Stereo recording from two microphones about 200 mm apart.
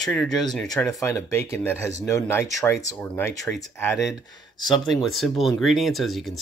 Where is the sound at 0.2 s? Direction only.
20° left (ahead or behind).